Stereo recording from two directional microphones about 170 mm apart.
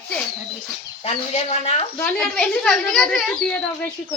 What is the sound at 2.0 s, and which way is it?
A woman's voice, 10° left (ahead or behind).